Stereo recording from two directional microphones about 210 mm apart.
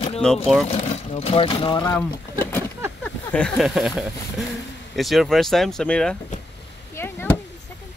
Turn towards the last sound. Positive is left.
turn(degrees=10)  # may be behind; listen again after turning